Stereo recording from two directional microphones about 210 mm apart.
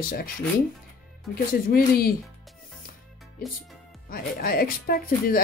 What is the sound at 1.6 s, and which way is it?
Speech, 45° left (ahead or behind).